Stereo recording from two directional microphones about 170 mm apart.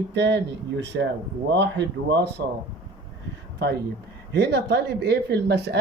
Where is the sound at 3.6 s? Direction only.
80° right.